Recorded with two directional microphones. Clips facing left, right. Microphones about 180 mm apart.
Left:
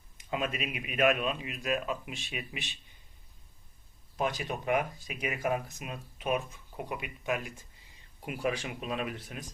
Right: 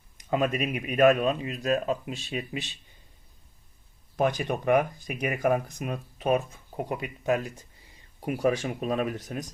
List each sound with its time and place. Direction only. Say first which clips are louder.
0.3 s speech: right 7 dB; 45° right (ahead or behind)
4.4 s speech: right 7 dB; 55° right (ahead or behind)